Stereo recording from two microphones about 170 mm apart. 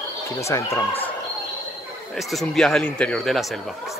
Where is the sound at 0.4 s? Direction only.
15° left (ahead or behind).